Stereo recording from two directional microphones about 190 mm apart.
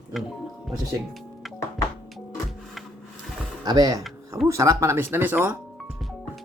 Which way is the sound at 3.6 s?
20° right (ahead or behind).